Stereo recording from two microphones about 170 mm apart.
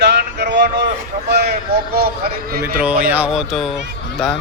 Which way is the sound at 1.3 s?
70° right (ahead or behind).